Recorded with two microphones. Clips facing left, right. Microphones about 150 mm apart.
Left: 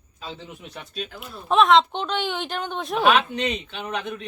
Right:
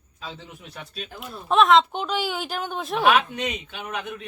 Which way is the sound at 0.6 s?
Centre (ahead or behind).